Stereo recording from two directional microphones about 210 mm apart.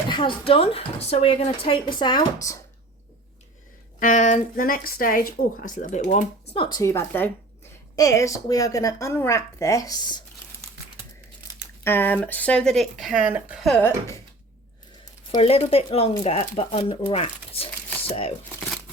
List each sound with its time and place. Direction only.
0.1 s a woman's voice: 25° left (ahead or behind)
4.0 s a woman's voice: 35° left (ahead or behind); by 10.2 s 20° left (ahead or behind)
11.8 s speech: 10° left (ahead or behind)
15.3 s a woman's voice: 30° left (ahead or behind)